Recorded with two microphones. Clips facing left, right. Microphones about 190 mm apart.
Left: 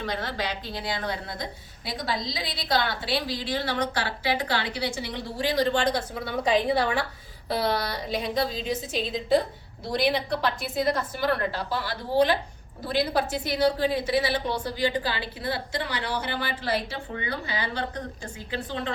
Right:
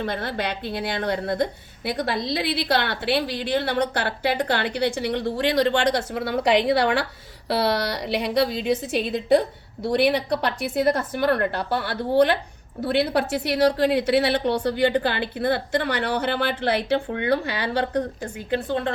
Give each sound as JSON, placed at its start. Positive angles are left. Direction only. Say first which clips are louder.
{"t": 0.0, "sound": "a woman's voice", "louder": "right 4 dB", "side_deg": -55}